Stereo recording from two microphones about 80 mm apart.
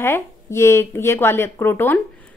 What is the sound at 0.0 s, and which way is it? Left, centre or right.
A woman's voice, left.